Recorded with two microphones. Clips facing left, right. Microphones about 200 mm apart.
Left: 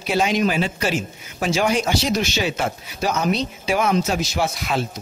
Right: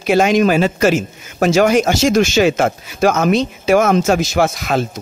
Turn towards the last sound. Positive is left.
turn(degrees=-45)  # may be behind; listen again after turning